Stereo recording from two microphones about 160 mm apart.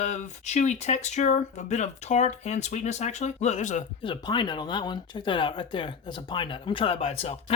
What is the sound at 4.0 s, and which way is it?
Speech, 30° left (ahead or behind).